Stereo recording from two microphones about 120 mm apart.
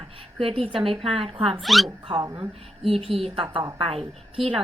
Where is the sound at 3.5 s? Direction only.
45° right (ahead or behind).